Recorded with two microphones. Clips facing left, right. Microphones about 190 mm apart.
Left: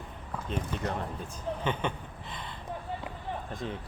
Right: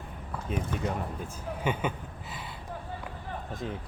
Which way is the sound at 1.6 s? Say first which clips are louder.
Right 2 dB; 10° right (ahead or behind).